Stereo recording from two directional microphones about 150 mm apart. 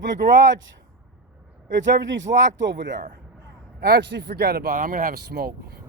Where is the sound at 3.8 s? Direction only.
90° right.